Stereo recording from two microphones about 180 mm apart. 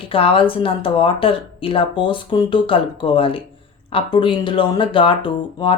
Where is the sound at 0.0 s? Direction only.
30° left (ahead or behind).